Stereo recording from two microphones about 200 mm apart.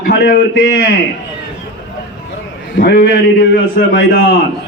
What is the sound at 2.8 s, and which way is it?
A man's voice, 50° left (ahead or behind).